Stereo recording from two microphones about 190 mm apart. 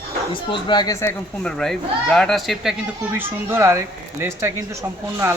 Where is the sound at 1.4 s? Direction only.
Centre (ahead or behind).